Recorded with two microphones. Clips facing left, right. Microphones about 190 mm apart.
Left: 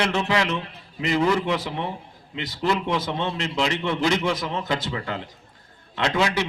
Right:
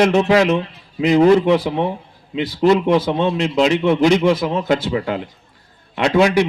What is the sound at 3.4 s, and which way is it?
Speech, 20° right (ahead or behind).